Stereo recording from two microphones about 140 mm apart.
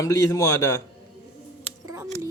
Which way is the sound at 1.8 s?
25° right (ahead or behind).